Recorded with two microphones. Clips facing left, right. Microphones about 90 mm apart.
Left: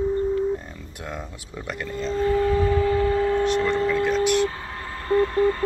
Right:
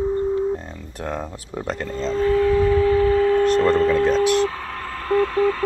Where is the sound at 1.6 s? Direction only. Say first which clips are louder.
Right 3 dB; 30° right (ahead or behind).